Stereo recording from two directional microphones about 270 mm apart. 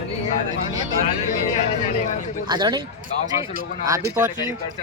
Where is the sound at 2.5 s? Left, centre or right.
Centre.